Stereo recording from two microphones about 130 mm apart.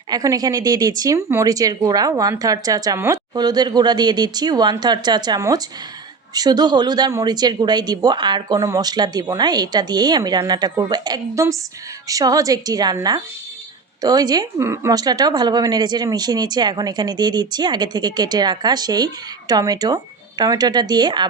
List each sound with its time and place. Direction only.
0.1 s speech: 30° right (ahead or behind)